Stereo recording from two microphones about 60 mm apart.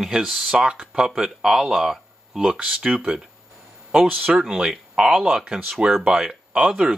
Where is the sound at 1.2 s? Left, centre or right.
Centre.